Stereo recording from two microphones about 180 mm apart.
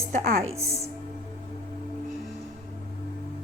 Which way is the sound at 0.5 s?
15° right (ahead or behind).